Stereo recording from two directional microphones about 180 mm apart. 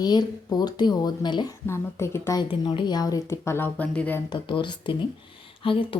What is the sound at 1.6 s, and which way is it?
Speech, 15° left (ahead or behind).